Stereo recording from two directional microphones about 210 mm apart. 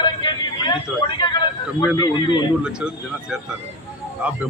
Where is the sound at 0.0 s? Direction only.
20° left (ahead or behind).